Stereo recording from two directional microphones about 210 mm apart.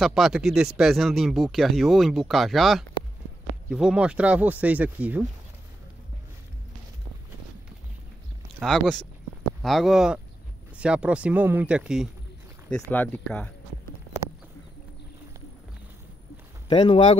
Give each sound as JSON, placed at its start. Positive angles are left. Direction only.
{"t": 0.0, "sound": "speech", "side_deg": 0}
{"t": 8.5, "sound": "speech", "side_deg": 0}
{"t": 12.9, "sound": "speech", "side_deg": 10}
{"t": 16.6, "sound": "speech", "side_deg": 20}